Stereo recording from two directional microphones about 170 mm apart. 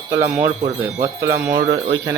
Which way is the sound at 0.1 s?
15° right (ahead or behind).